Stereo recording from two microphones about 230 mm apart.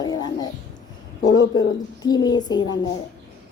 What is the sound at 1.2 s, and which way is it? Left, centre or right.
Speech, left.